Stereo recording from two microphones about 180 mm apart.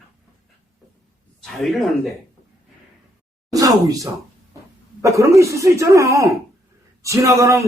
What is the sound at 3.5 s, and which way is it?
A man's voice, 20° right (ahead or behind).